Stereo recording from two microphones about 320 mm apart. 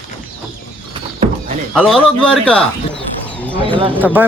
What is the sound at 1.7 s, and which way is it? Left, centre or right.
Speech, centre.